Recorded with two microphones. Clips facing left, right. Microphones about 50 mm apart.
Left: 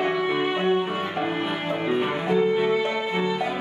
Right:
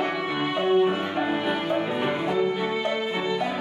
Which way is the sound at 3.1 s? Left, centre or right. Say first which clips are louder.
Left 1 dB; centre.